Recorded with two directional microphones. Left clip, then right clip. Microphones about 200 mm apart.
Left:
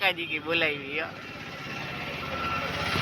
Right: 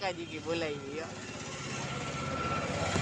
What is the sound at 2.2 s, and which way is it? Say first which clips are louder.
Vehicle: left 4 dB; 60° right (ahead or behind).